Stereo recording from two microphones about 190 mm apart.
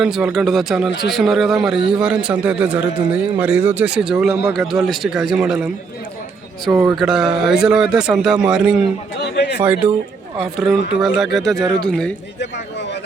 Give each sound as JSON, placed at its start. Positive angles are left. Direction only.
{"t": 0.0, "sound": "a man's voice", "side_deg": -5}
{"t": 6.9, "sound": "a man's voice", "side_deg": -5}
{"t": 9.2, "sound": "a sound", "side_deg": 60}
{"t": 9.6, "sound": "a man's voice", "side_deg": -10}